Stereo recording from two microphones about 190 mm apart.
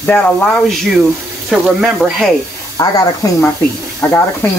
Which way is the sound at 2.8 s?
20° left (ahead or behind).